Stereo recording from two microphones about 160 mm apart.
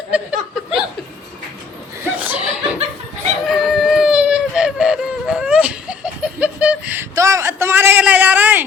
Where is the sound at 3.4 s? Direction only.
Centre (ahead or behind).